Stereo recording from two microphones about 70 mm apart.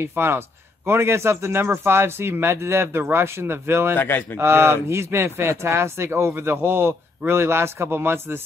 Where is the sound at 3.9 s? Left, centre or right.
Left.